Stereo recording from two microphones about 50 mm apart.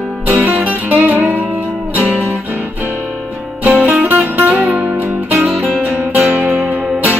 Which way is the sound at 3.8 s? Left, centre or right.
Right.